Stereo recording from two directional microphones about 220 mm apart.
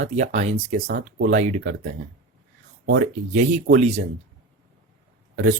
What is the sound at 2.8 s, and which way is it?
Speech, 40° right (ahead or behind).